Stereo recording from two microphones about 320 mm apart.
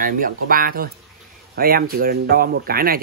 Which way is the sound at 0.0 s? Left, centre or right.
Right.